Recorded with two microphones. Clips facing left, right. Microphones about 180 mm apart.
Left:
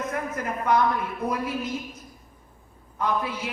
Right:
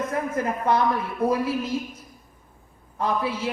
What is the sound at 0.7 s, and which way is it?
Speech, 30° right (ahead or behind).